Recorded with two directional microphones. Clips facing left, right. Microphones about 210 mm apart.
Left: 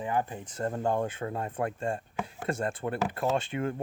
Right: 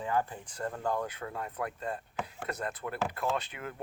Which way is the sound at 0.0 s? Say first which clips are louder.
Left 1 dB; 20° left (ahead or behind).